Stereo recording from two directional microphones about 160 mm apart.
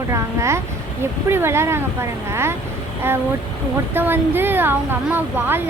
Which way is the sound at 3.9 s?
15° right (ahead or behind).